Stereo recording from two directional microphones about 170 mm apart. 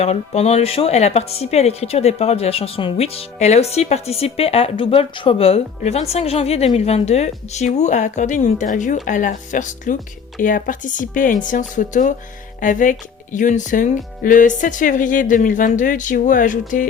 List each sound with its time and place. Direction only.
0.0 s speech: 40° left (ahead or behind)